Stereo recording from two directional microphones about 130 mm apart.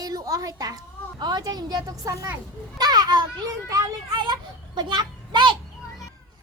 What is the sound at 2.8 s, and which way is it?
Children playing, 30° right (ahead or behind).